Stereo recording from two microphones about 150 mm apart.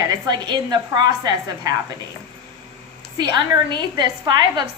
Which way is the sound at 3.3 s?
30° right (ahead or behind).